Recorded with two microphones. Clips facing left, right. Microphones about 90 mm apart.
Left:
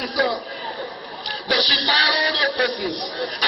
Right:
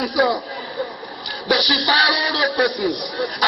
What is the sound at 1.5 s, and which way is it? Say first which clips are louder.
Music: right 3 dB; 20° right (ahead or behind).